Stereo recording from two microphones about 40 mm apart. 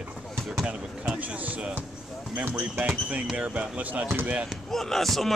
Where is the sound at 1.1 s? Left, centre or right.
Right.